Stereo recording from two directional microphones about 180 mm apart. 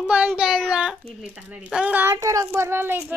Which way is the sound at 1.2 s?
5° right (ahead or behind).